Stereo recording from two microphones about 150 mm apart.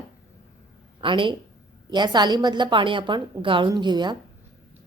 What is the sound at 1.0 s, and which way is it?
A woman's voice, 35° right (ahead or behind).